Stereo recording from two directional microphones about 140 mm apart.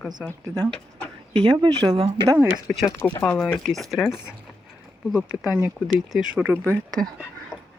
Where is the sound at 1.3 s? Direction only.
30° right (ahead or behind).